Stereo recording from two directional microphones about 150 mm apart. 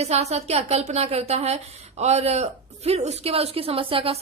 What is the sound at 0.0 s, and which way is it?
A woman's voice, 45° right (ahead or behind).